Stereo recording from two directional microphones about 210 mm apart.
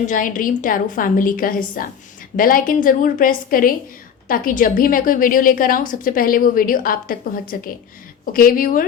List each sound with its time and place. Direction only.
0.0 s a woman's voice: 40° left (ahead or behind)